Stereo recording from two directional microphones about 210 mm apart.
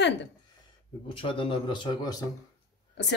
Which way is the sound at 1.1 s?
25° left (ahead or behind).